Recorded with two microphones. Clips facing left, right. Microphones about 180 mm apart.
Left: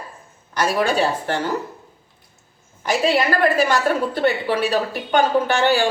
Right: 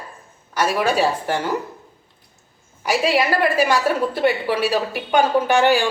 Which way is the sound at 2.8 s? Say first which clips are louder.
Even; 10° right (ahead or behind).